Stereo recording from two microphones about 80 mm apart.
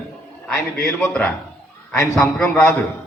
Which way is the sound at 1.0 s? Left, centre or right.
Centre.